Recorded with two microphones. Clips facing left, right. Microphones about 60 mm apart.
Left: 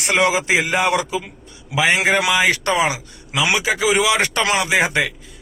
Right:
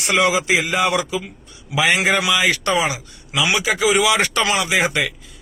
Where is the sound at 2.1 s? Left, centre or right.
Left.